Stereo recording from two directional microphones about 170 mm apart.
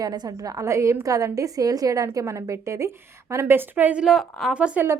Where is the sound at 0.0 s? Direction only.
20° right (ahead or behind).